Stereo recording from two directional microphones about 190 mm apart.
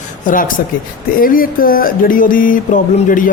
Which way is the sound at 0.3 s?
45° left (ahead or behind).